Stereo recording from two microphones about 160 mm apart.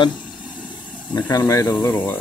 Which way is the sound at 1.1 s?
25° left (ahead or behind).